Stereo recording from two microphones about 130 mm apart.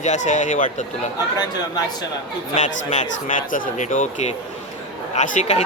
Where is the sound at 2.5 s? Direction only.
70° left (ahead or behind).